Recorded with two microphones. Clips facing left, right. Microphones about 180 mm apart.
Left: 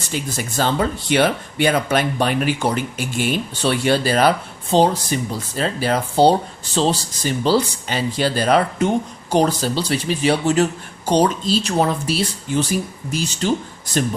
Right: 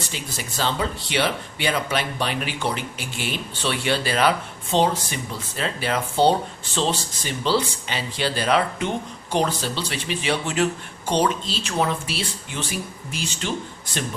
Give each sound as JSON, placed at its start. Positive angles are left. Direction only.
{"t": 0.1, "sound": "speech", "side_deg": 50}